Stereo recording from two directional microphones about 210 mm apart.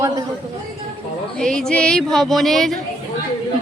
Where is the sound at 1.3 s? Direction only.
5° left (ahead or behind).